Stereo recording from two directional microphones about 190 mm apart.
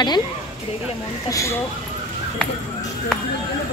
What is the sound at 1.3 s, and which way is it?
Speech, 15° left (ahead or behind).